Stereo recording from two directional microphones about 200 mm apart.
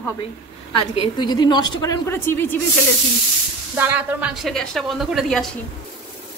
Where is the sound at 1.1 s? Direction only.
20° left (ahead or behind).